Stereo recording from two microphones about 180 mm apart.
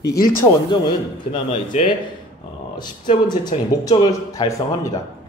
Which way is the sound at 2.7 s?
25° left (ahead or behind).